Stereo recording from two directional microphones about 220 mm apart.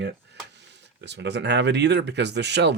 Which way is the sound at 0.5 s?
50° right (ahead or behind).